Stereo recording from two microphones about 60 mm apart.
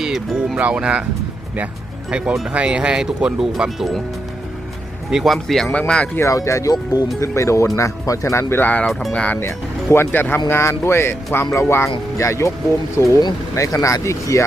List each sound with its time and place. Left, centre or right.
0.3 s speech: centre
2.0 s speech: centre
5.1 s speech: centre
5.7 s speech: left
6.2 s speech: left
7.2 s speech: left
8.9 s speech: centre
9.1 s speech: centre
9.5 s speech: left
10.5 s speech: left
13.0 s speech: left